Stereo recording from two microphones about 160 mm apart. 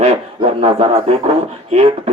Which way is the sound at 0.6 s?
35° right (ahead or behind).